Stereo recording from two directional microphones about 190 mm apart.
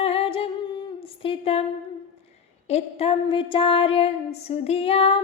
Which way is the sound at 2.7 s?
35° left (ahead or behind).